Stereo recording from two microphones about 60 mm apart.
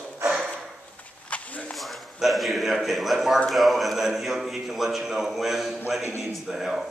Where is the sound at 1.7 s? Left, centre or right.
Centre.